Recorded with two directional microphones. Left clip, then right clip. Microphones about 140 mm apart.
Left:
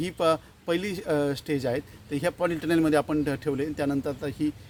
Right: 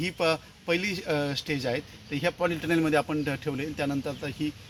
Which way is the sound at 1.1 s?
90° left.